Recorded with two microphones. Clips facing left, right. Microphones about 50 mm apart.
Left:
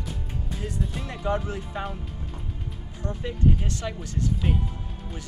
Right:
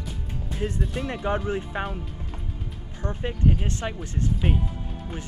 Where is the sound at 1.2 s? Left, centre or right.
Right.